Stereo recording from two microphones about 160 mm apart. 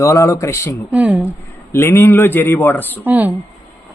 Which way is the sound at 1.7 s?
15° left (ahead or behind).